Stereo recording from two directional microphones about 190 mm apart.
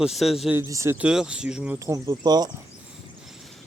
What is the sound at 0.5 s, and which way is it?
Speech, 15° right (ahead or behind).